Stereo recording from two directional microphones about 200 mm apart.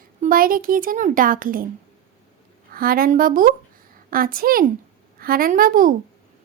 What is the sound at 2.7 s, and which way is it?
A woman's voice, 45° right (ahead or behind).